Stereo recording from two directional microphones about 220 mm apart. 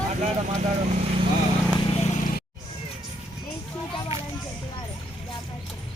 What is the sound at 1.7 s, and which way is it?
Vehicle, 30° left (ahead or behind).